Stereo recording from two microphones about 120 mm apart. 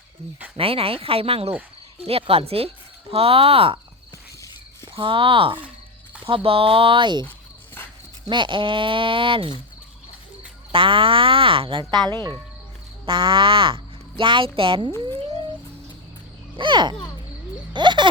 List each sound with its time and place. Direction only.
0.5 s speech: 50° right (ahead or behind)
4.9 s speech: 45° right (ahead or behind)
7.8 s dog: 20° left (ahead or behind)
8.3 s speech: 40° right (ahead or behind)
10.7 s speech: 45° right (ahead or behind)
16.6 s a child's voice: 40° right (ahead or behind)
17.7 s a sound: 40° right (ahead or behind)